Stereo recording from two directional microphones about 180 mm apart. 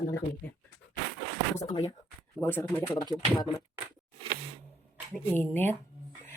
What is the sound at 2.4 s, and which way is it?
Speech, 15° left (ahead or behind).